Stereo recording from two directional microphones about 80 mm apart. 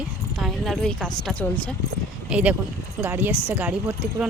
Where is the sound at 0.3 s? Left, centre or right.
Centre.